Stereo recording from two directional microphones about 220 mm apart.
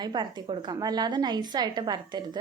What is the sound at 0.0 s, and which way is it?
A woman's voice, 20° right (ahead or behind).